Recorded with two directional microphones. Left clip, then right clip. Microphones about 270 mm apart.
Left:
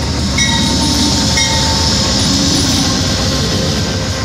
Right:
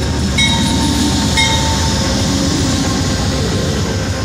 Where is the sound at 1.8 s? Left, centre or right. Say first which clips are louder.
Left 3 dB; centre.